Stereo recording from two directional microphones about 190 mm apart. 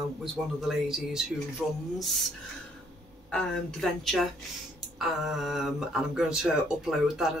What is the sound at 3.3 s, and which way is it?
Speech, 5° left (ahead or behind).